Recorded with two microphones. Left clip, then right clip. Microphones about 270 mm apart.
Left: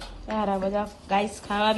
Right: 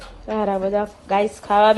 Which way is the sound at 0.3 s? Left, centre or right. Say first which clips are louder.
Right 5 dB; centre.